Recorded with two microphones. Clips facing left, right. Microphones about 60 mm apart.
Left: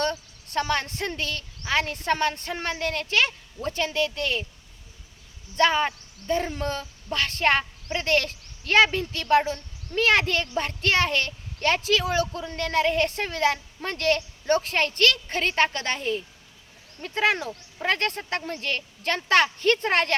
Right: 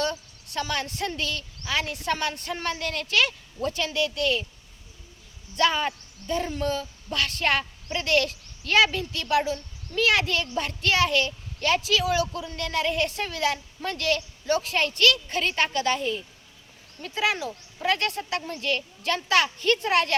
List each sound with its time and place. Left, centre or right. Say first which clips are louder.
0.0 s speech: left 1 dB; left
5.5 s speech: left 2 dB; left